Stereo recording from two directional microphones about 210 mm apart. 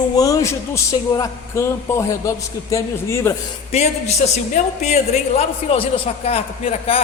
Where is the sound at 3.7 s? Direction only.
30° left (ahead or behind).